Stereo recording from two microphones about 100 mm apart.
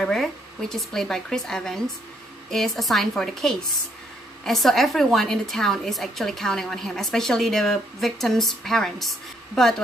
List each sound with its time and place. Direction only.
0.0 s a woman's voice: 5° left (ahead or behind)